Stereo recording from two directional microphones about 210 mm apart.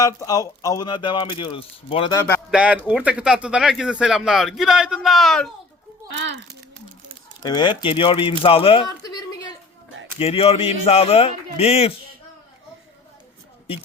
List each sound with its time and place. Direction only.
0.0 s speech: 15° left (ahead or behind)
2.5 s speech: 5° right (ahead or behind)
7.4 s speech: 20° left (ahead or behind)
10.2 s speech: 30° left (ahead or behind)